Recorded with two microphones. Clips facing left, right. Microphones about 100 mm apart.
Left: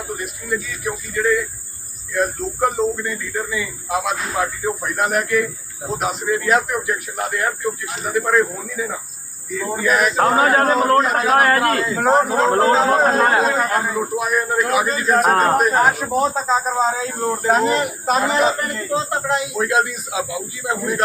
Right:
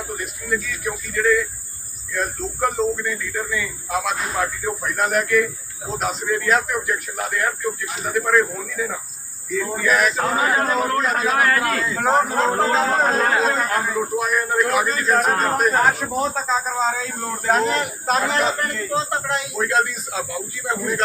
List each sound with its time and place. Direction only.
0.1 s a man's voice: centre (ahead or behind)